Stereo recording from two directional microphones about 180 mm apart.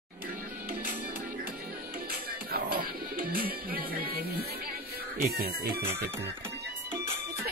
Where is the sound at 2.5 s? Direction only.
50° right (ahead or behind).